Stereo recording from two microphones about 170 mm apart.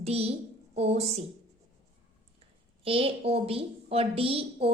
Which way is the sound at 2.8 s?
35° right (ahead or behind).